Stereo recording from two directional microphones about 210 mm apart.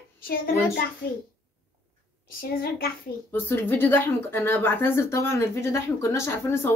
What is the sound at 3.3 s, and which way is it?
Speech, 10° left (ahead or behind).